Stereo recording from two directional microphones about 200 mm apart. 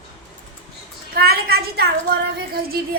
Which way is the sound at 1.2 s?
50° right (ahead or behind).